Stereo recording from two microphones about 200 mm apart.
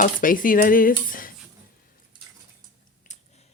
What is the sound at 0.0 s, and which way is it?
Cutlery, 45° left (ahead or behind).